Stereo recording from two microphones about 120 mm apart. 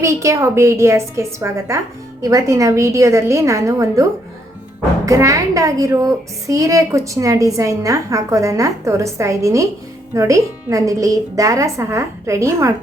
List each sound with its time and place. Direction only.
0.0 s a woman's voice: 25° right (ahead or behind)
5.0 s a woman's voice: 25° right (ahead or behind)